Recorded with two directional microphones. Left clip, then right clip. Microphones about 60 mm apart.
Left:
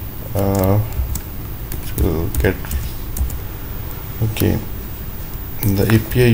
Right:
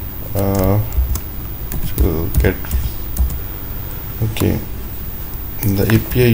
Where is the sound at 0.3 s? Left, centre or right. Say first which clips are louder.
Even; centre.